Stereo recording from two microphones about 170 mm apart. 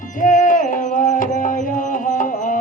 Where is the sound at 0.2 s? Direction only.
50° left (ahead or behind).